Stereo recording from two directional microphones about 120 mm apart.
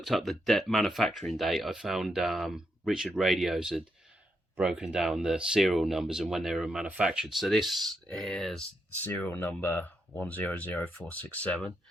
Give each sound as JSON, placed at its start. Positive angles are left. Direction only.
{"t": 0.0, "sound": "speech", "side_deg": 0}
{"t": 9.0, "sound": "speech", "side_deg": 15}